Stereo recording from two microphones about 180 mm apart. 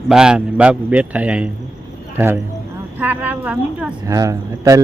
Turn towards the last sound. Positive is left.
turn(degrees=-20)  # may be behind; listen again after turning